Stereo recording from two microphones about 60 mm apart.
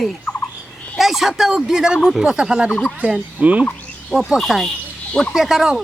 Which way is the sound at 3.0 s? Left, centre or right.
Right.